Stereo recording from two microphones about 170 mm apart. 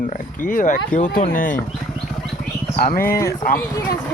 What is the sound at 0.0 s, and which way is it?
Speech, 50° left (ahead or behind).